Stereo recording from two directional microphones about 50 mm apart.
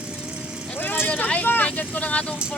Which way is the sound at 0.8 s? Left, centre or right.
Left.